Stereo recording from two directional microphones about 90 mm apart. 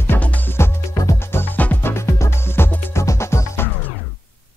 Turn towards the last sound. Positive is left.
turn(degrees=30)  # may be behind; listen again after turning